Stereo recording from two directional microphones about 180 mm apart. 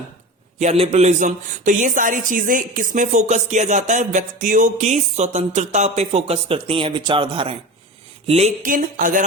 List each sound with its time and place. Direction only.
0.6 s a man's voice: 35° right (ahead or behind)